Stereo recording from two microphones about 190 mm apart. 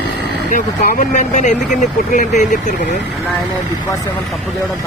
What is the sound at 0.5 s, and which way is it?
Speech, 45° left (ahead or behind).